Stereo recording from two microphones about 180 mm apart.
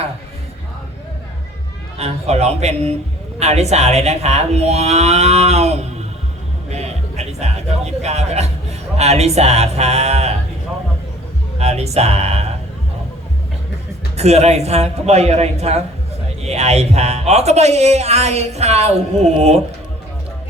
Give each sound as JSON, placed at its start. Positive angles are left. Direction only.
{"t": 2.0, "sound": "speech", "side_deg": -35}
{"t": 6.7, "sound": "music", "side_deg": -40}
{"t": 8.0, "sound": "a sound", "side_deg": -35}
{"t": 9.0, "sound": "speech", "side_deg": -35}
{"t": 11.6, "sound": "speech", "side_deg": -35}
{"t": 14.2, "sound": "speech", "side_deg": -35}